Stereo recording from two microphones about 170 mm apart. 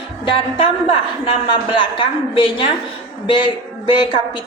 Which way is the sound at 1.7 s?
30° left (ahead or behind).